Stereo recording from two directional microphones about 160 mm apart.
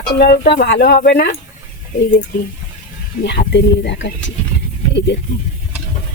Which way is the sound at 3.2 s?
90° left.